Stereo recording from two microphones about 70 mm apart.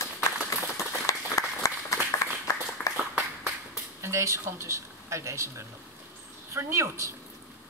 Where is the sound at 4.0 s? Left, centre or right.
Right.